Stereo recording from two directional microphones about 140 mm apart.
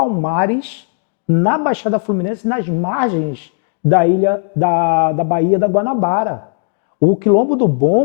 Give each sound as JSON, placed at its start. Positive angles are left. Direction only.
{"t": 0.0, "sound": "a man's voice", "side_deg": 25}